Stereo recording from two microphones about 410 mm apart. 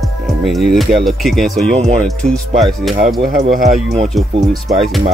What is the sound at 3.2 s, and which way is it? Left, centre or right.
Speech, centre.